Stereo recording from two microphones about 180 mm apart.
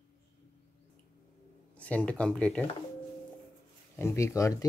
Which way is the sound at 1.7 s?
5° left (ahead or behind).